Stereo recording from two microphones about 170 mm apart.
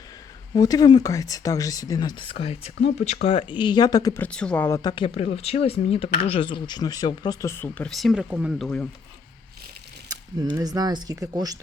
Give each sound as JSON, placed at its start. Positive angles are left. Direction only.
{"t": 0.5, "sound": "speech", "side_deg": 20}
{"t": 3.6, "sound": "speech", "side_deg": 25}
{"t": 4.2, "sound": "speech", "side_deg": 5}
{"t": 10.4, "sound": "speech", "side_deg": -20}